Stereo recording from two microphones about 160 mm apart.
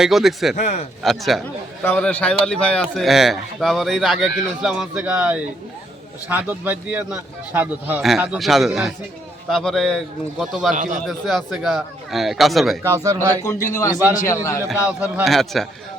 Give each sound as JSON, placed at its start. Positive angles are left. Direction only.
{"t": 0.0, "sound": "a man's voice", "side_deg": 0}
{"t": 0.5, "sound": "a man's voice", "side_deg": 45}
{"t": 1.0, "sound": "a man's voice", "side_deg": 0}
{"t": 1.8, "sound": "a man's voice", "side_deg": 10}
{"t": 12.8, "sound": "speech", "side_deg": -20}
{"t": 13.1, "sound": "a man's voice", "side_deg": 20}
{"t": 14.8, "sound": "a man's voice", "side_deg": -10}